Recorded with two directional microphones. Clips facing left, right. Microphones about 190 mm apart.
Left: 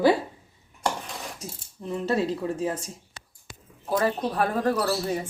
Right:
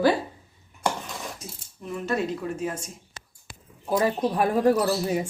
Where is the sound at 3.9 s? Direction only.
15° right (ahead or behind).